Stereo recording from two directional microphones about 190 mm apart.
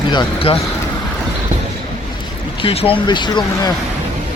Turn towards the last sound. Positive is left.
turn(degrees=20)  # may be behind; listen again after turning